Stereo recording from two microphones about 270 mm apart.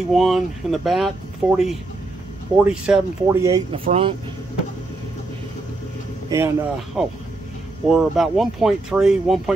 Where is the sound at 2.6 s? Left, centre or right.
Centre; by 4.2 s right.